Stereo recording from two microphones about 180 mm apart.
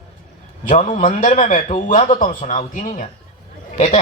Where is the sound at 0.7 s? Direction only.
45° left (ahead or behind).